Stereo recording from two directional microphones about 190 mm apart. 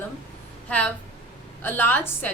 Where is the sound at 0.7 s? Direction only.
5° left (ahead or behind).